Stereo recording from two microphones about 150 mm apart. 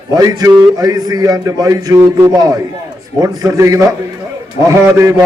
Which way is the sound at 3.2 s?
20° right (ahead or behind).